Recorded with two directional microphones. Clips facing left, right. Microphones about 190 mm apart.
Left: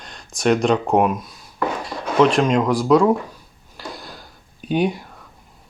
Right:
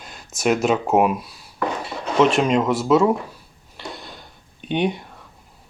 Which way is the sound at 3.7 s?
Centre (ahead or behind).